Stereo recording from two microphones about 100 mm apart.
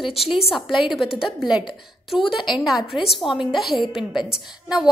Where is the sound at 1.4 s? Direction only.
10° right (ahead or behind).